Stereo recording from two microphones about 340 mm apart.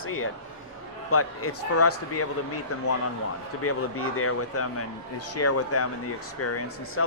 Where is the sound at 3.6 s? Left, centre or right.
Left.